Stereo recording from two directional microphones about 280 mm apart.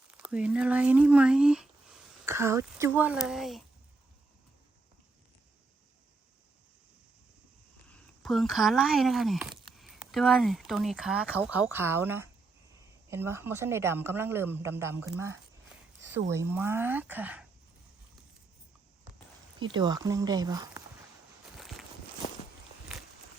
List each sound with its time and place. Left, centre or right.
0.1 s speech: centre
8.2 s speech: centre
19.5 s speech: centre
21.6 s walk: centre
22.2 s walk: left